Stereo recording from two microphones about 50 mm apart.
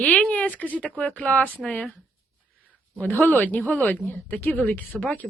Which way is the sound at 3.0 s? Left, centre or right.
Left.